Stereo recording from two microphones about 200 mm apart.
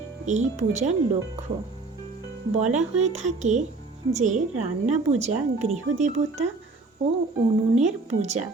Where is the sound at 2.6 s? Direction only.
35° right (ahead or behind).